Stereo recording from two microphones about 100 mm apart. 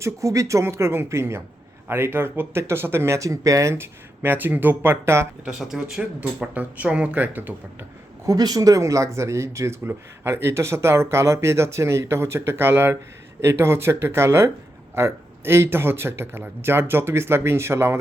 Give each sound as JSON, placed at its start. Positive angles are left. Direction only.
{"t": 0.0, "sound": "speech", "side_deg": -30}
{"t": 5.5, "sound": "speech", "side_deg": -5}
{"t": 8.3, "sound": "speech", "side_deg": -40}